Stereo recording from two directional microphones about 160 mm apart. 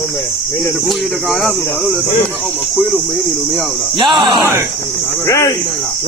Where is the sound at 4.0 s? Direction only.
30° right (ahead or behind).